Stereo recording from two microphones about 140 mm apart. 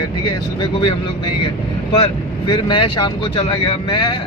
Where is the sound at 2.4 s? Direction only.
35° left (ahead or behind).